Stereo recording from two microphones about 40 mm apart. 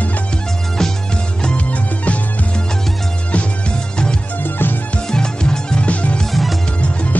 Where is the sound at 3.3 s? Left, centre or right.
Left.